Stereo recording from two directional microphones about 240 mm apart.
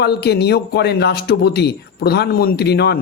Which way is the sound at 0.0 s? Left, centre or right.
Left.